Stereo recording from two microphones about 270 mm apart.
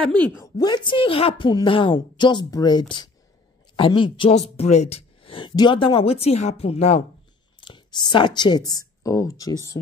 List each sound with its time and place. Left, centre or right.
0.1 s a woman's voice: centre; by 7.0 s left
7.6 s a sound: centre
8.4 s a woman's voice: centre